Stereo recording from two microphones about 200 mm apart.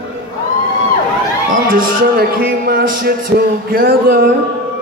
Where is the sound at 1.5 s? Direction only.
45° right (ahead or behind).